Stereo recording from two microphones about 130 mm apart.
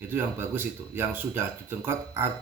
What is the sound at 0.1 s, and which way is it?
Speech, 15° right (ahead or behind).